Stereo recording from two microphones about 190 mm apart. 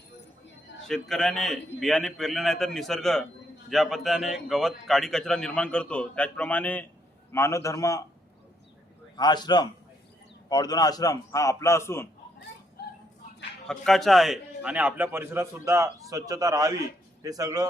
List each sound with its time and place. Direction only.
0.9 s a man's voice: centre (ahead or behind); by 8.0 s 15° left (ahead or behind)
9.1 s a man's voice: 20° left (ahead or behind)
12.8 s dog: 55° left (ahead or behind)
13.7 s a man's voice: centre (ahead or behind); by 17.7 s 20° right (ahead or behind)